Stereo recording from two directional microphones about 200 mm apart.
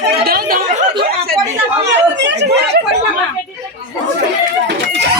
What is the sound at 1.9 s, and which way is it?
Chatter, 60° right (ahead or behind).